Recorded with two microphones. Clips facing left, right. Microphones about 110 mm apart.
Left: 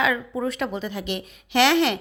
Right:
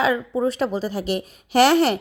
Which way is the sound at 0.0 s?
30° right (ahead or behind).